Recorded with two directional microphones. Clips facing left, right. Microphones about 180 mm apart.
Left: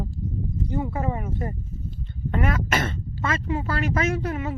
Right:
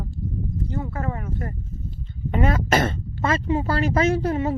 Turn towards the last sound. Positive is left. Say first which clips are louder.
# right 5 dB
turn(degrees=-35)  # may be behind; listen again after turning